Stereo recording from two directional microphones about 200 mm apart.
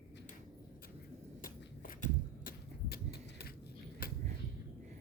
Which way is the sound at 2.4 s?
50° left (ahead or behind).